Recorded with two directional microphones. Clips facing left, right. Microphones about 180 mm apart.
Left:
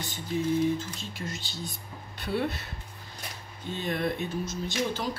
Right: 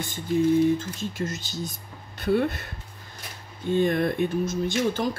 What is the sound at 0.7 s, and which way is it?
Speech, 45° right (ahead or behind).